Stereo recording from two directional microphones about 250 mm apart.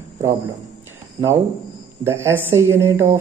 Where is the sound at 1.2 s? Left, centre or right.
Centre.